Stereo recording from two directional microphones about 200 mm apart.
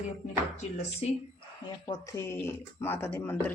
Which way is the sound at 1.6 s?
20° left (ahead or behind).